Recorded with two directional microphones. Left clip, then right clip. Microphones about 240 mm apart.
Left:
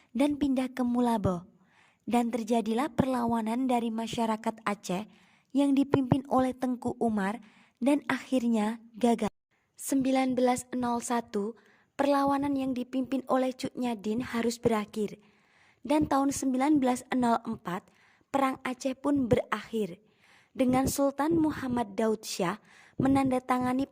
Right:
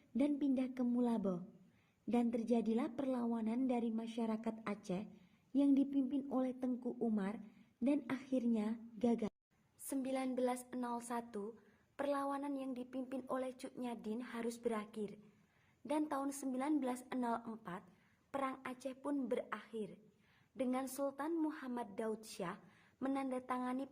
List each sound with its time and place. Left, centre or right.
0.2 s a woman's voice: left